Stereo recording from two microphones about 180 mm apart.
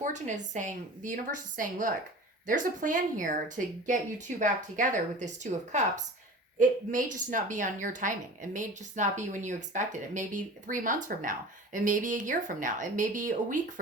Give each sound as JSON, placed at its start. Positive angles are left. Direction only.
{"t": 0.0, "sound": "a woman's voice", "side_deg": -40}